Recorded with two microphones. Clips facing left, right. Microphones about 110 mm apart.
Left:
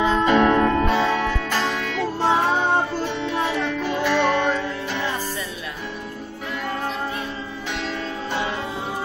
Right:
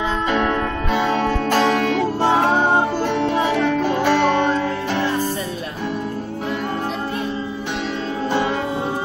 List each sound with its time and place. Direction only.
1.5 s music: 60° right (ahead or behind)